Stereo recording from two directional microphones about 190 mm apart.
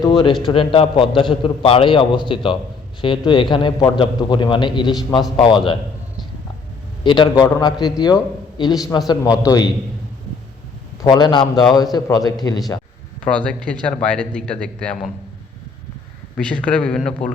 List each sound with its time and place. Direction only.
0.0 s a man's voice: 20° left (ahead or behind)
7.0 s a man's voice: 25° left (ahead or behind)
11.0 s a man's voice: 25° left (ahead or behind)
13.2 s speech: 5° left (ahead or behind)
16.4 s speech: 5° left (ahead or behind)